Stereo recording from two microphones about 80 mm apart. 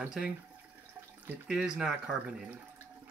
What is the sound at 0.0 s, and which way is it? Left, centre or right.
Speech, centre.